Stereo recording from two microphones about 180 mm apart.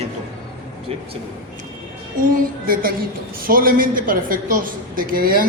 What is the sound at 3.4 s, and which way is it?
A woman's voice, 50° right (ahead or behind).